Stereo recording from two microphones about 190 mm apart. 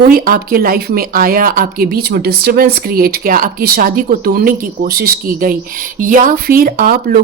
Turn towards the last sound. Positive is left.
turn(degrees=-50)  # may be behind; listen again after turning